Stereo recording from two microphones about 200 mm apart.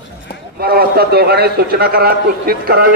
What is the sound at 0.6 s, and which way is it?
A man's voice, 50° right (ahead or behind).